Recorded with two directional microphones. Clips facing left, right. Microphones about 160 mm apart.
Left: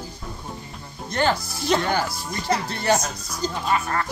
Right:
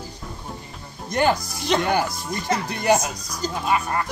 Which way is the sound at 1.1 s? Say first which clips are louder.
Right 2 dB; 15° right (ahead or behind).